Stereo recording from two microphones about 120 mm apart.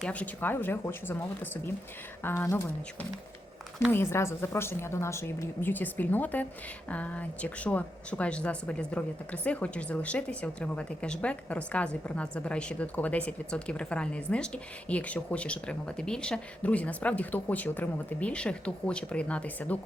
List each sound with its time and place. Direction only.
0.0 s a woman's voice: 10° left (ahead or behind)
3.9 s a woman's voice: 20° left (ahead or behind)